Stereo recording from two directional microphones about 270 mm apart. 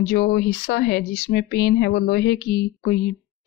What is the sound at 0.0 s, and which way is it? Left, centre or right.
Speech, left.